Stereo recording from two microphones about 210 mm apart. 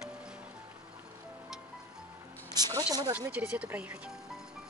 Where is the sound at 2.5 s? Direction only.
20° right (ahead or behind).